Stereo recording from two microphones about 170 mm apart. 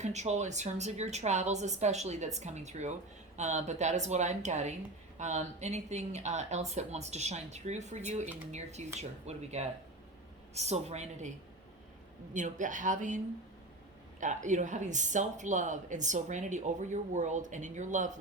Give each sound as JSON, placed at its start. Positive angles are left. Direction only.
{"t": 0.0, "sound": "a woman's voice", "side_deg": -40}
{"t": 12.3, "sound": "speech", "side_deg": -50}